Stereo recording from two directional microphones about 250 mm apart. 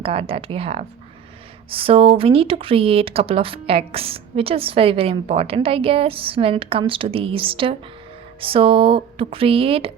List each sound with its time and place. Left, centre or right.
0.0 s speech: right